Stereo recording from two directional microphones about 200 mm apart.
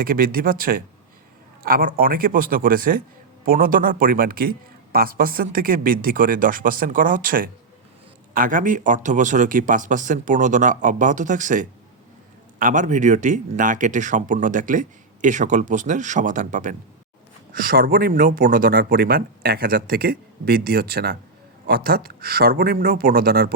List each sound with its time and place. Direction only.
0.0 s a man's voice: 45° right (ahead or behind)